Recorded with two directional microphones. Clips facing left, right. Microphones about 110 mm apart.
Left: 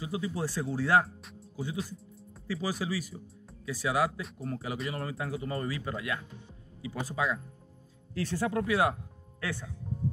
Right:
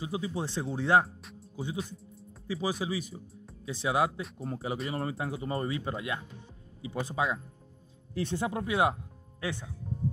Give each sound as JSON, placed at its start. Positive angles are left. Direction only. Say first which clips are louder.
{"t": 0.0, "sound": "speech", "louder": "even", "side_deg": -25}
{"t": 2.4, "sound": "speech", "louder": "right 1 dB", "side_deg": -20}